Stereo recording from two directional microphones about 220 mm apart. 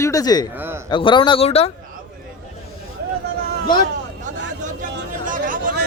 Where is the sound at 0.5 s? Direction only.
10° right (ahead or behind).